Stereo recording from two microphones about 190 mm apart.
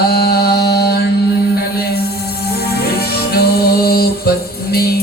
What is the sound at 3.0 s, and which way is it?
Music, 55° left (ahead or behind).